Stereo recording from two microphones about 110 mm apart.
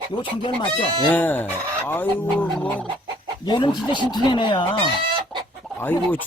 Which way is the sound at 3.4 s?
45° left (ahead or behind).